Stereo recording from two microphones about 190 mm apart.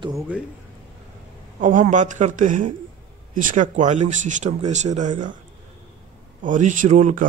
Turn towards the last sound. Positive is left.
turn(degrees=-40)  # may be behind; listen again after turning